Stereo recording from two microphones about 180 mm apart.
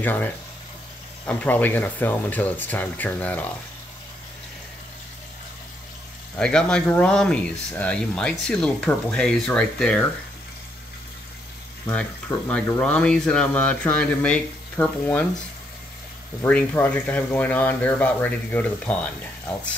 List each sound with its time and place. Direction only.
0.0 s speech: 10° left (ahead or behind)
6.3 s speech: 5° left (ahead or behind)
11.9 s speech: 5° left (ahead or behind)
16.4 s speech: 10° left (ahead or behind)